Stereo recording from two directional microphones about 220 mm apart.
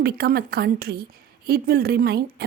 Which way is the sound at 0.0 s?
45° right (ahead or behind).